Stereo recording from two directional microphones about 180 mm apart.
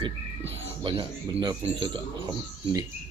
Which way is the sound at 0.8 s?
25° right (ahead or behind).